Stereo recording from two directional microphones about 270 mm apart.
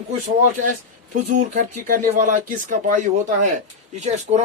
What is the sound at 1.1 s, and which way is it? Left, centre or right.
Speech, right.